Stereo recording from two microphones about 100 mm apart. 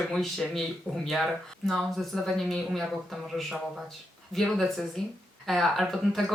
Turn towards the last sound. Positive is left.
turn(degrees=0)  # may be behind; listen again after turning